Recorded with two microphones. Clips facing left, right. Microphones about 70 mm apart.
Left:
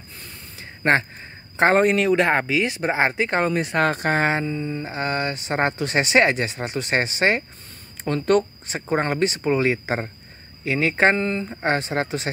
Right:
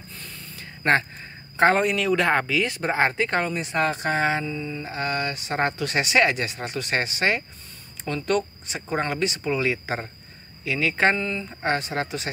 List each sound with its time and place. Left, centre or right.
0.6 s a sound: centre
1.6 s speech: left; by 3.4 s centre
3.5 s speech: left
8.0 s speech: left
11.6 s speech: left